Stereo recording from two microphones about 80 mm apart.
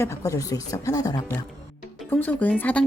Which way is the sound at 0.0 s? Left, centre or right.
Left.